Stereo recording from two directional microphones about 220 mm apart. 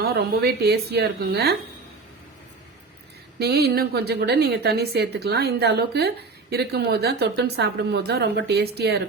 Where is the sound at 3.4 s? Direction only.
45° right (ahead or behind).